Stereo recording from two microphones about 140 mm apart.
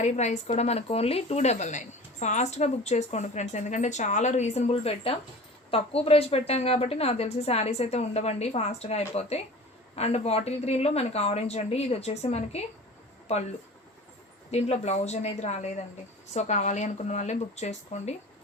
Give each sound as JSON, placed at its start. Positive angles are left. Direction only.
{"t": 0.0, "sound": "speech", "side_deg": 55}
{"t": 14.5, "sound": "speech", "side_deg": 50}